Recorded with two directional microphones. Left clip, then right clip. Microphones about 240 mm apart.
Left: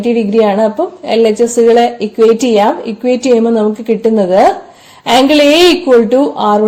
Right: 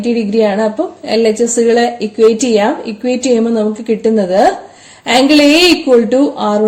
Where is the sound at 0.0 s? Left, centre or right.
Left.